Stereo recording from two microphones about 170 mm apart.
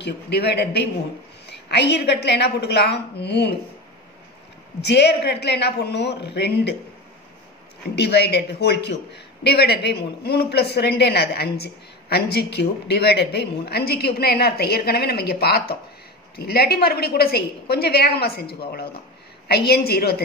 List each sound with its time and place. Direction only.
0.0 s a man's voice: 75° left (ahead or behind)
4.8 s a man's voice: 75° left (ahead or behind)
7.9 s a man's voice: 75° left (ahead or behind)